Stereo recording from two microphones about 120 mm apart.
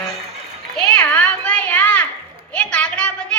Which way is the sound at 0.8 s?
10° left (ahead or behind).